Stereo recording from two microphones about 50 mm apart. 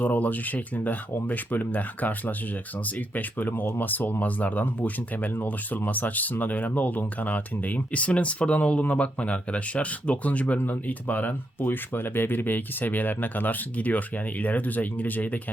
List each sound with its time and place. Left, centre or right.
0.0 s speech: left